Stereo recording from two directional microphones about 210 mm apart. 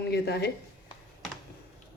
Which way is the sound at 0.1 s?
50° left (ahead or behind).